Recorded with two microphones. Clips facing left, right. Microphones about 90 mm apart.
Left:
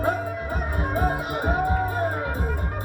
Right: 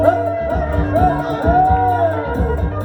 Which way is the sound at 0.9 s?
15° left (ahead or behind).